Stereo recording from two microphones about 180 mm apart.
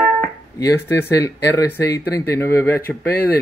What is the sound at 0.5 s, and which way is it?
Speech, 15° left (ahead or behind).